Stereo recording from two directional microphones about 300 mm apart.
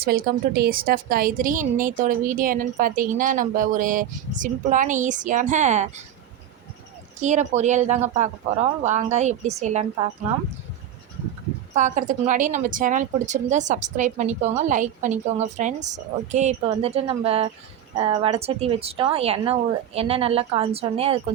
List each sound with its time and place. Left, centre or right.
0.0 s a woman's voice: right
7.2 s a woman's voice: right
11.7 s a woman's voice: right